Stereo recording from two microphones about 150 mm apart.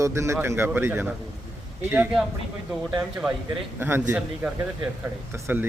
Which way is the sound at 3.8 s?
15° right (ahead or behind).